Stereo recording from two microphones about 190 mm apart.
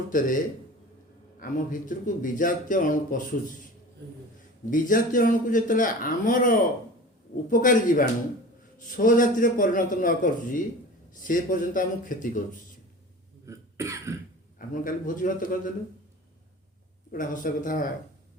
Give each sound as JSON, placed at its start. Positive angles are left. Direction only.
{"t": 0.1, "sound": "a man's voice", "side_deg": 45}
{"t": 1.4, "sound": "a man's voice", "side_deg": 45}
{"t": 4.7, "sound": "a man's voice", "side_deg": 45}
{"t": 13.4, "sound": "cough", "side_deg": -15}
{"t": 14.7, "sound": "a man's voice", "side_deg": 45}
{"t": 17.1, "sound": "a man's voice", "side_deg": 45}